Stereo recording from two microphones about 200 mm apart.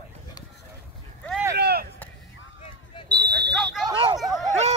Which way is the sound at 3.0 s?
55° right (ahead or behind).